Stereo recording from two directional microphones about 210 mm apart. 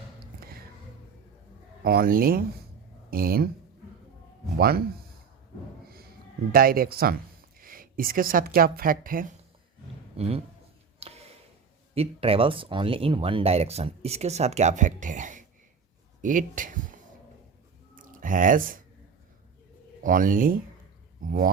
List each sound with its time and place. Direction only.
1.8 s speech: 45° right (ahead or behind)
4.5 s speech: 45° right (ahead or behind)
6.5 s a woman's voice: 45° right (ahead or behind)
10.2 s speech: 30° right (ahead or behind)
11.0 s a sound: 30° right (ahead or behind)
11.9 s speech: 25° right (ahead or behind)
17.9 s a sound: 40° right (ahead or behind)
20.0 s speech: 40° right (ahead or behind)